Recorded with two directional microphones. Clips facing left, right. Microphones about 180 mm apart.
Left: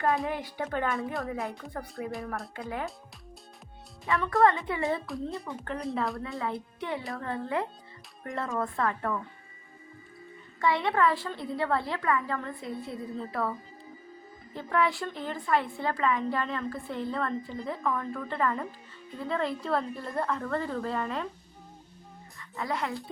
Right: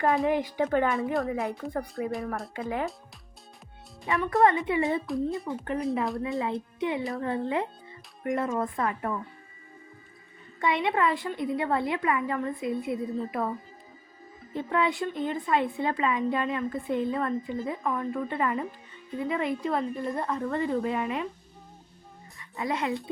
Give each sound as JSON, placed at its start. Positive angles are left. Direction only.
{"t": 0.0, "sound": "a woman's voice", "side_deg": 0}
{"t": 4.0, "sound": "a woman's voice", "side_deg": -20}
{"t": 5.0, "sound": "a woman's voice", "side_deg": 0}
{"t": 5.5, "sound": "a woman's voice", "side_deg": -15}
{"t": 10.6, "sound": "a woman's voice", "side_deg": -20}
{"t": 14.5, "sound": "a woman's voice", "side_deg": -20}
{"t": 22.4, "sound": "a child's voice", "side_deg": -20}